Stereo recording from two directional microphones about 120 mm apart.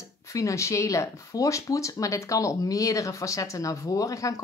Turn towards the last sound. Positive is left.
turn(degrees=25)  # may be behind; listen again after turning